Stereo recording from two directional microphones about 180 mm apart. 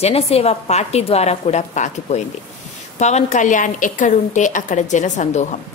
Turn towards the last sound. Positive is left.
turn(degrees=40)  # may be behind; listen again after turning